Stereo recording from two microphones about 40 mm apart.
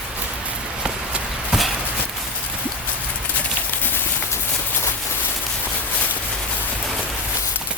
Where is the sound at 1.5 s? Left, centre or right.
Centre.